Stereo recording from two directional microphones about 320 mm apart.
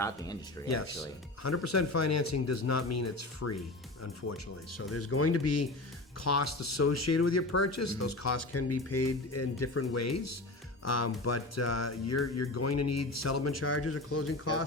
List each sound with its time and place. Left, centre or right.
0.0 s speech: centre
1.4 s speech: left
4.9 s speech: left